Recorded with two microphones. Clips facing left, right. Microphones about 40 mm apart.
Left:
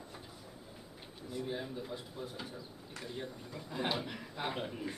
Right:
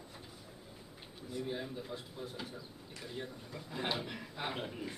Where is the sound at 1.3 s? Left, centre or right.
Centre.